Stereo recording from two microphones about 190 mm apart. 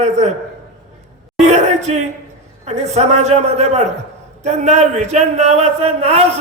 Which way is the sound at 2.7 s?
35° right (ahead or behind).